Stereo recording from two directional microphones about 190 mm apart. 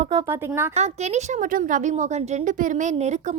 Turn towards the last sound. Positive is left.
turn(degrees=-35)  # may be behind; listen again after turning